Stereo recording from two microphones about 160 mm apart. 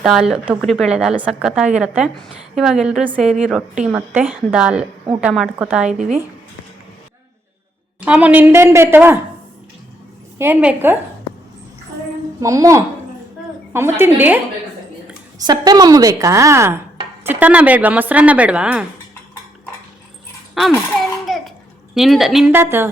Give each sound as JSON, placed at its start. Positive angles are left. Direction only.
{"t": 0.0, "sound": "a woman's voice", "side_deg": -5}
{"t": 8.0, "sound": "speech", "side_deg": -10}
{"t": 10.3, "sound": "speech", "side_deg": -15}
{"t": 12.4, "sound": "a woman's voice", "side_deg": -20}
{"t": 15.4, "sound": "a woman's voice", "side_deg": -25}
{"t": 21.2, "sound": "babbling", "side_deg": 0}
{"t": 21.9, "sound": "a woman's voice", "side_deg": 0}
{"t": 22.5, "sound": "speech", "side_deg": -15}